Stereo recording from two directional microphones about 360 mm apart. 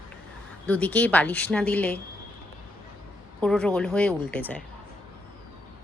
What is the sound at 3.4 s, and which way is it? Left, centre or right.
A woman's voice, centre.